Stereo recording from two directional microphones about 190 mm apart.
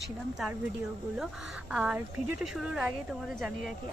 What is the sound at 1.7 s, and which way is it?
Speech, 5° right (ahead or behind).